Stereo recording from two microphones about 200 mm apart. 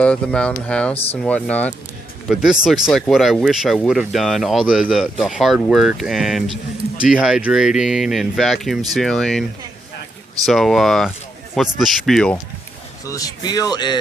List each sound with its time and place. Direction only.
0.0 s speech: 5° left (ahead or behind)
13.1 s speech: 15° left (ahead or behind)